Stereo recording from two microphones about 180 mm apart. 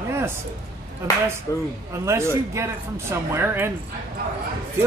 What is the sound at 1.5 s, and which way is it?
Speech, 15° left (ahead or behind).